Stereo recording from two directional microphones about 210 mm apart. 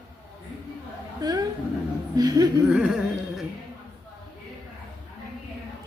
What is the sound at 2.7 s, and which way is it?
Music, 5° right (ahead or behind).